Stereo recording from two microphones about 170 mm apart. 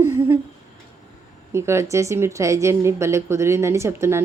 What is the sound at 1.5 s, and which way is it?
A woman's voice, 15° right (ahead or behind).